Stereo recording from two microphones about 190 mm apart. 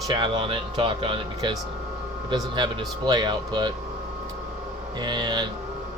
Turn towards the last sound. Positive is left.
turn(degrees=-25)  # may be behind; listen again after turning